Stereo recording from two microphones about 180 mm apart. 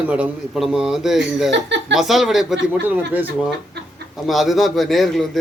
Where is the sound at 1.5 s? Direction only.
85° right.